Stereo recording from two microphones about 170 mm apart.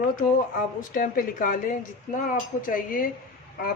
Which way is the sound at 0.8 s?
50° left (ahead or behind).